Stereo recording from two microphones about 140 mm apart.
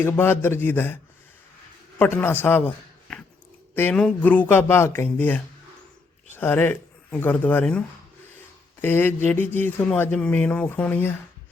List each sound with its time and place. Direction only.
0.0 s speech: 15° left (ahead or behind)
2.0 s a man's voice: 15° left (ahead or behind)